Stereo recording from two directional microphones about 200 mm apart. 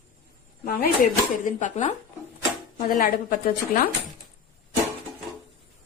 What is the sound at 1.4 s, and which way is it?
A woman's voice, 40° left (ahead or behind).